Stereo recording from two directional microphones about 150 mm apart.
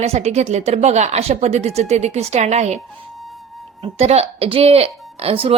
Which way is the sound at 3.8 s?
40° right (ahead or behind).